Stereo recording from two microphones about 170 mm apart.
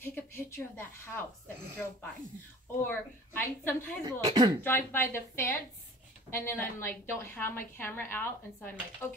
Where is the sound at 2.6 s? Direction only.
10° left (ahead or behind).